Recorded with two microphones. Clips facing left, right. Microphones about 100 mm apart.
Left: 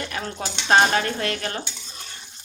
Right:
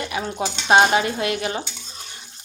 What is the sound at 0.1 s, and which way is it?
Speech, 10° right (ahead or behind).